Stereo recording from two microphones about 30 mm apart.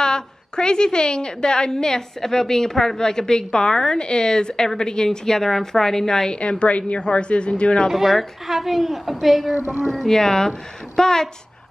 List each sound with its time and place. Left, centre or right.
0.0 s a woman's voice: left
6.6 s speech: left
7.9 s a woman's voice: centre
10.0 s a woman's voice: centre